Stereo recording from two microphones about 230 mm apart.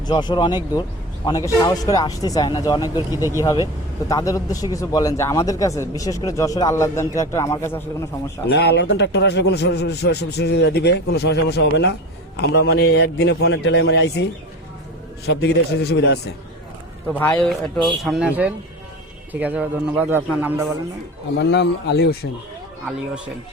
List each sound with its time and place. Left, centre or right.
0.1 s a man's voice: centre
8.4 s a man's voice: left
15.3 s a man's voice: left
17.2 s a man's voice: centre
21.3 s a man's voice: left